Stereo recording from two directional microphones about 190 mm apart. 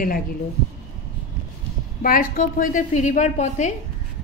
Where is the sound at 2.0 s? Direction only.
45° left (ahead or behind).